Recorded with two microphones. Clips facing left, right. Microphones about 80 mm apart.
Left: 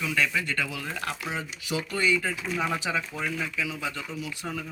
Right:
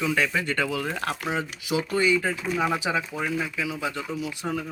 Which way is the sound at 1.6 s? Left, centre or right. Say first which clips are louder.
Right 3 dB; centre.